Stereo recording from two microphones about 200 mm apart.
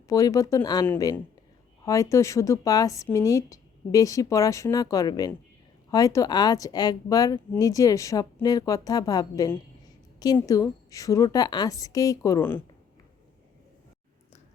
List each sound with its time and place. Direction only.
0.1 s speech: 15° left (ahead or behind)